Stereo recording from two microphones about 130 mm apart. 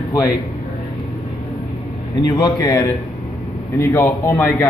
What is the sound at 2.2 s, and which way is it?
A man's voice, 35° left (ahead or behind).